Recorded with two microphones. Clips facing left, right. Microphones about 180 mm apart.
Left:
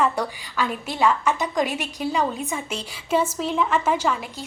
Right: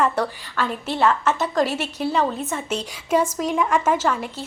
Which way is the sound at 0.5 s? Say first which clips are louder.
Right 1 dB; 5° left (ahead or behind).